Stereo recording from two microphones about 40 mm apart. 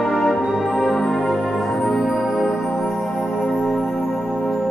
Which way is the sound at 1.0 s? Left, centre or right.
Centre.